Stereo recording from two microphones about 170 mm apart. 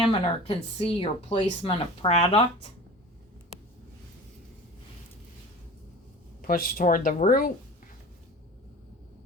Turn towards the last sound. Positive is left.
turn(degrees=55)  # may be behind; listen again after turning